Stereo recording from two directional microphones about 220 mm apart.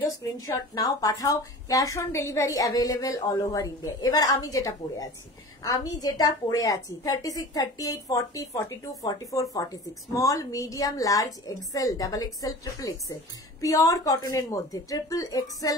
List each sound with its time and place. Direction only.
0.2 s a woman's voice: 15° left (ahead or behind)